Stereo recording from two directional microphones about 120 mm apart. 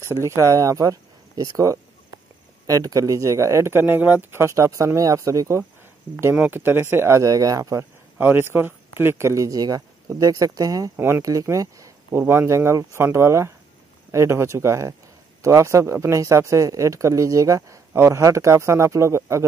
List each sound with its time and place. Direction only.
0.0 s speech: 25° right (ahead or behind)
6.3 s speech: 15° right (ahead or behind); by 7.8 s 30° right (ahead or behind)
8.2 s speech: 15° right (ahead or behind)